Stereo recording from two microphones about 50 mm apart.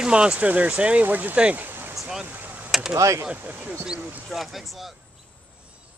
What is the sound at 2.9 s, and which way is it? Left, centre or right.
Speech, right.